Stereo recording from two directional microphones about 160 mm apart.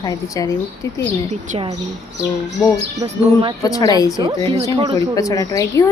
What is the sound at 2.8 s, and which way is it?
Speech, 40° right (ahead or behind).